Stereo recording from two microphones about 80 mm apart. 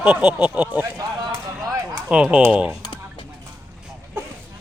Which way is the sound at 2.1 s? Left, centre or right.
Centre.